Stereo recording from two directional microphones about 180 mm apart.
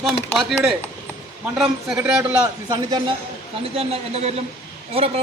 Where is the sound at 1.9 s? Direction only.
10° right (ahead or behind).